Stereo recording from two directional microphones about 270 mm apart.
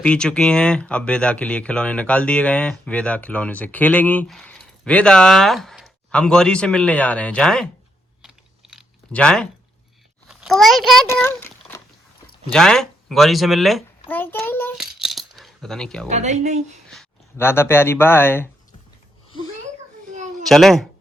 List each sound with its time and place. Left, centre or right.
0.0 s speech: centre
8.2 s typing: centre
10.2 s a child's voice: centre
16.0 s speech: right
16.9 s speech: centre
20.5 s speech: centre